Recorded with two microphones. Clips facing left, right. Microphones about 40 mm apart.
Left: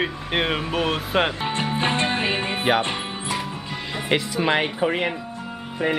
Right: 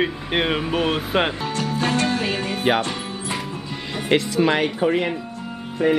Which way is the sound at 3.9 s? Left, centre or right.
Centre.